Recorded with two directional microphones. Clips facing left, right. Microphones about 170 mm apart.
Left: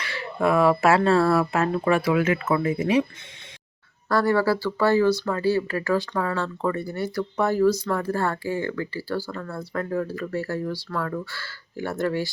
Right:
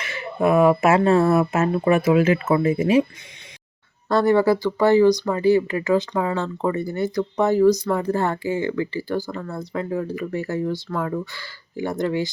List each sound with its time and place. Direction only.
0.0 s speech: 20° right (ahead or behind)
4.1 s speech: 20° right (ahead or behind)